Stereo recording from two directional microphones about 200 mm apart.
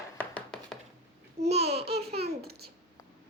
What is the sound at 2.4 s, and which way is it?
Babbling, 50° right (ahead or behind).